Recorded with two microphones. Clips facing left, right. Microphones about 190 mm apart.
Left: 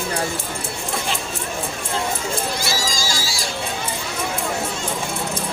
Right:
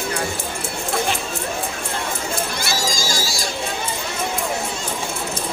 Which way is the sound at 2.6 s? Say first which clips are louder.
Right 1 dB; 50° right (ahead or behind).